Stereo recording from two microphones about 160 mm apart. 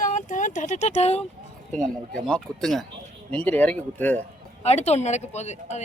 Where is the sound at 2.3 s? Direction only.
Centre (ahead or behind).